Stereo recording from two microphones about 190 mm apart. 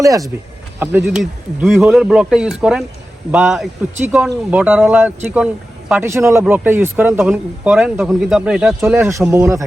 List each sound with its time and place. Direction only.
0.0 s speech: 20° right (ahead or behind)
0.8 s speech: 5° right (ahead or behind)